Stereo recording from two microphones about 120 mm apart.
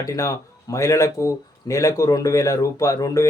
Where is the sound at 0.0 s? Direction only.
30° left (ahead or behind).